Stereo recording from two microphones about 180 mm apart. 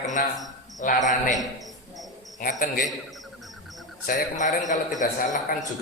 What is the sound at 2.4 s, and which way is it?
Speech, 50° left (ahead or behind).